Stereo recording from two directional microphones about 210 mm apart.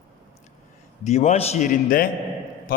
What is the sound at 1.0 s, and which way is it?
A man's voice, 30° left (ahead or behind).